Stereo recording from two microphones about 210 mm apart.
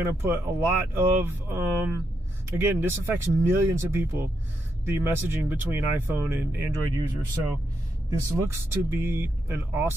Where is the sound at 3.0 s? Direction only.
10° right (ahead or behind).